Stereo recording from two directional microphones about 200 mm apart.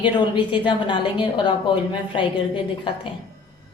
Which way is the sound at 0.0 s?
25° left (ahead or behind).